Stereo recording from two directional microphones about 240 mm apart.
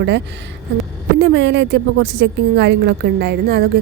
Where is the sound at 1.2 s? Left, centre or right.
Right.